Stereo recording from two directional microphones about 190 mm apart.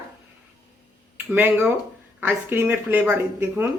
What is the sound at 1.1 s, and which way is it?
Speech, 10° right (ahead or behind).